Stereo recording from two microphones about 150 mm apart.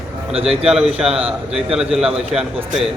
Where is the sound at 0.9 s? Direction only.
40° right (ahead or behind).